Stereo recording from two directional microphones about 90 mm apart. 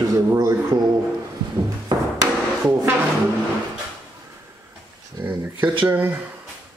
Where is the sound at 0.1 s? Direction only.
40° right (ahead or behind).